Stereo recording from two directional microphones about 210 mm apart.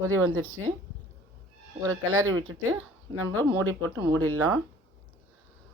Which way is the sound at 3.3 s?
90° right.